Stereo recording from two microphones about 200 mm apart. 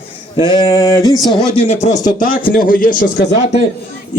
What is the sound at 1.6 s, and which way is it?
Speech, 35° left (ahead or behind).